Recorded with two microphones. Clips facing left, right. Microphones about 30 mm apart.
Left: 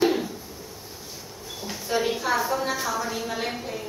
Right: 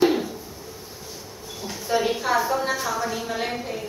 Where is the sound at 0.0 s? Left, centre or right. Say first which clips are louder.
Right 2 dB; centre.